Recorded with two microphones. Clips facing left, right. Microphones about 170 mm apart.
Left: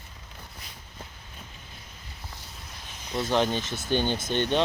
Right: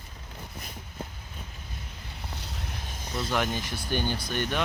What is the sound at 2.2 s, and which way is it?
Boat, 70° right (ahead or behind).